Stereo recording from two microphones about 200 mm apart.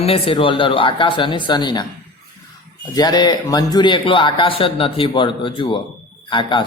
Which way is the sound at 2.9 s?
20° left (ahead or behind).